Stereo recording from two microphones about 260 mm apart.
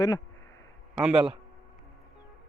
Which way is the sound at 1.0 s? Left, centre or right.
Centre.